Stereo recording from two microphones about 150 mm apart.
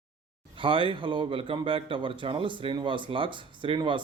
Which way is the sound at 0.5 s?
35° right (ahead or behind).